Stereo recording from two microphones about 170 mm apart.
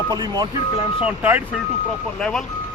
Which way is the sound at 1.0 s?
10° right (ahead or behind).